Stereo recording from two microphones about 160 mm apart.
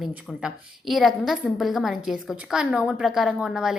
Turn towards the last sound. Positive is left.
turn(degrees=-5)  # may be behind; listen again after turning